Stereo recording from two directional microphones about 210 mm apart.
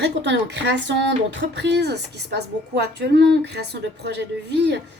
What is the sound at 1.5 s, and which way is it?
A woman's voice, 55° right (ahead or behind).